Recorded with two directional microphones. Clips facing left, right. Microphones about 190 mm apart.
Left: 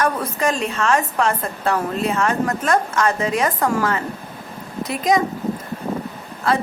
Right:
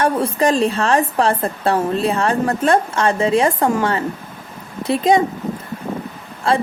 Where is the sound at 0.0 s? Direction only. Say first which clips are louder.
Right 4 dB; 30° right (ahead or behind).